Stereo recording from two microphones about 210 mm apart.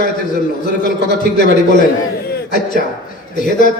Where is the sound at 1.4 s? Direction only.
40° left (ahead or behind).